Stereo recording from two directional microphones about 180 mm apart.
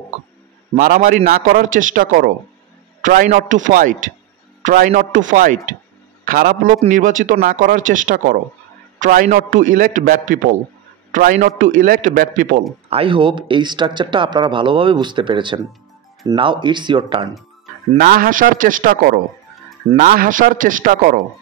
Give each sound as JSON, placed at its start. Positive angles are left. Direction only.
{"t": 0.7, "sound": "a man's voice", "side_deg": -45}
{"t": 4.6, "sound": "a man's voice", "side_deg": -45}
{"t": 12.9, "sound": "speech", "side_deg": -30}
{"t": 17.9, "sound": "a man's voice", "side_deg": -55}